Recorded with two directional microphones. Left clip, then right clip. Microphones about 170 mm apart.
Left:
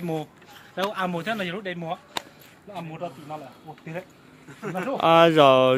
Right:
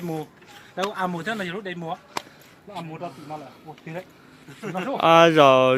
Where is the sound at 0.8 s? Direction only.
35° left (ahead or behind).